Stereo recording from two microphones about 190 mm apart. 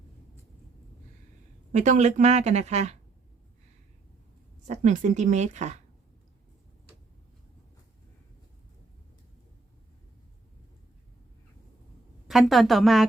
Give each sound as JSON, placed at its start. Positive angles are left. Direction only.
{"t": 1.7, "sound": "speech", "side_deg": -40}
{"t": 4.6, "sound": "speech", "side_deg": -40}
{"t": 12.3, "sound": "a woman's voice", "side_deg": 0}